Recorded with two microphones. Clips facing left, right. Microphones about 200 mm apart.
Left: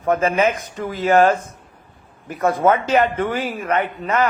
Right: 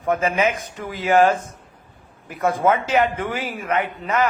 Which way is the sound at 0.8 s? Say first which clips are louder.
Left 2 dB; 50° left (ahead or behind).